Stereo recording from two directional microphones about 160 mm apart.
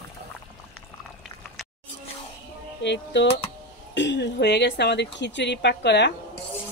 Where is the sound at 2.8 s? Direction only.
90° left.